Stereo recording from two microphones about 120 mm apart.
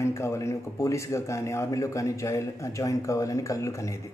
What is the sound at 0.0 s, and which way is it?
A man's voice, 25° left (ahead or behind).